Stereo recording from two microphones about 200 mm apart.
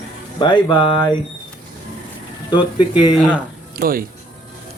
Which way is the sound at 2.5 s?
20° left (ahead or behind).